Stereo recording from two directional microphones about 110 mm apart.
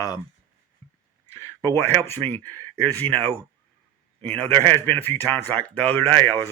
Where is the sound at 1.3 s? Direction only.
25° left (ahead or behind).